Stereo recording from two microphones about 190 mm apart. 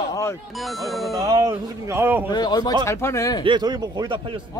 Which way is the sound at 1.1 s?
20° right (ahead or behind).